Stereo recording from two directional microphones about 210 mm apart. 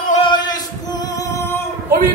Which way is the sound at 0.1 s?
20° left (ahead or behind).